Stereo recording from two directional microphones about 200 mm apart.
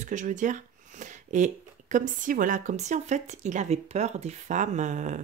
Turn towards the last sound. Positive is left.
turn(degrees=-40)  # may be behind; listen again after turning